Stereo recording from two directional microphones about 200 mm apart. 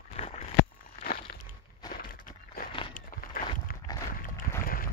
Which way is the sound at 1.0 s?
50° left (ahead or behind).